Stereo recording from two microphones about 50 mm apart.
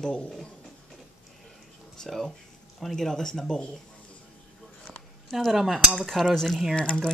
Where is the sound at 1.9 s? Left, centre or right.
Centre.